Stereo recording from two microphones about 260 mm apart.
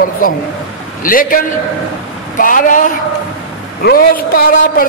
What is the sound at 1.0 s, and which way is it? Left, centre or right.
A man's voice, left.